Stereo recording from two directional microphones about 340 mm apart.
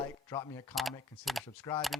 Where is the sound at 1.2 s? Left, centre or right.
Centre.